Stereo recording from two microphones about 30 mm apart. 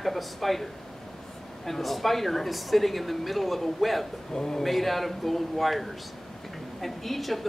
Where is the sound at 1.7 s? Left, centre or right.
Centre.